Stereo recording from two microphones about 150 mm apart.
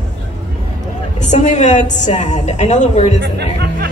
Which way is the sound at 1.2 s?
50° left (ahead or behind).